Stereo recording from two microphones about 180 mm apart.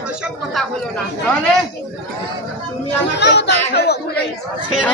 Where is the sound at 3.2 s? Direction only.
70° left (ahead or behind).